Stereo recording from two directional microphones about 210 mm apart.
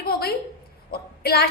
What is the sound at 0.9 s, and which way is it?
Child singing, 45° left (ahead or behind).